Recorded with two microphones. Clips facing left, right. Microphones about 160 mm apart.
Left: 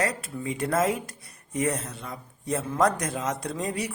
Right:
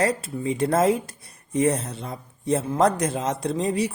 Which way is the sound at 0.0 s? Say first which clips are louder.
Right 5 dB; 30° right (ahead or behind).